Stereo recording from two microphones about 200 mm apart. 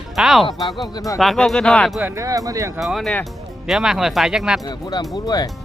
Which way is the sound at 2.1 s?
15° right (ahead or behind).